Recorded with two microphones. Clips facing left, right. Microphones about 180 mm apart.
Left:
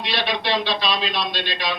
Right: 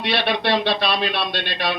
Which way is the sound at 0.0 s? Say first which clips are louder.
Right 4 dB; 60° right (ahead or behind).